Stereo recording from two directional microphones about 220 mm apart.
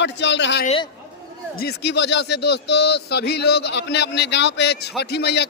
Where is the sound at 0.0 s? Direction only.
55° left (ahead or behind).